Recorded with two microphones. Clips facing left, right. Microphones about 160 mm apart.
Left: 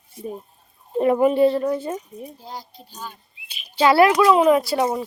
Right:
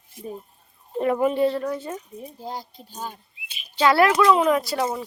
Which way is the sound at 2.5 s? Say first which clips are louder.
Right 2 dB; 45° right (ahead or behind).